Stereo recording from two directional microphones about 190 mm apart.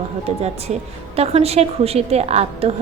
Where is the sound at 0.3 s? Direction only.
35° right (ahead or behind).